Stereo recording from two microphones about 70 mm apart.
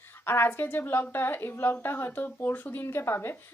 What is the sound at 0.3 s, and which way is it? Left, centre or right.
A woman's voice, left.